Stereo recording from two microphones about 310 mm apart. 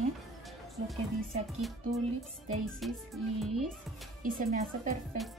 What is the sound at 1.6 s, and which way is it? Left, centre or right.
Speech, centre.